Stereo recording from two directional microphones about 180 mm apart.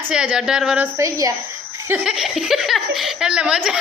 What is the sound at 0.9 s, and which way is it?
Speech, 15° right (ahead or behind).